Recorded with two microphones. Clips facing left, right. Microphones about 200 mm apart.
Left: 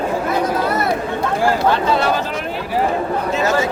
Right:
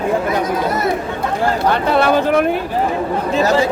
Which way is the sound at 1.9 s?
60° right (ahead or behind).